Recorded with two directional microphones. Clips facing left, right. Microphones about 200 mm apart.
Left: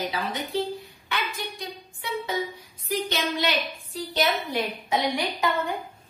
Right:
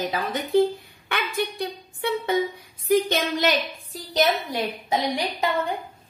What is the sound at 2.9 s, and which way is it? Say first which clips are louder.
A woman's voice: right 6 dB; 50° right (ahead or behind).